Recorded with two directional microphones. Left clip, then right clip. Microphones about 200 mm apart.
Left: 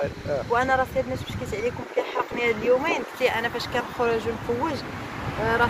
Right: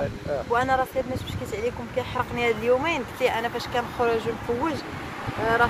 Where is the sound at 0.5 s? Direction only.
10° right (ahead or behind).